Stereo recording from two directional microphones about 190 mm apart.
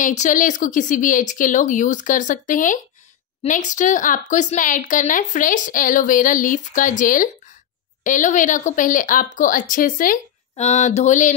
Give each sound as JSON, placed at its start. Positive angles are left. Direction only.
{"t": 0.0, "sound": "a woman's voice", "side_deg": 40}
{"t": 10.5, "sound": "mantra", "side_deg": 35}